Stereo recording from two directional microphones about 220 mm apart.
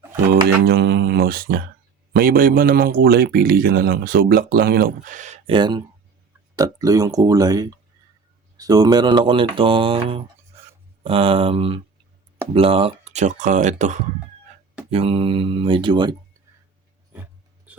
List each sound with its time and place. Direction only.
0.3 s speech: 50° right (ahead or behind); by 5.5 s 30° right (ahead or behind)
5.5 s speech: 20° right (ahead or behind)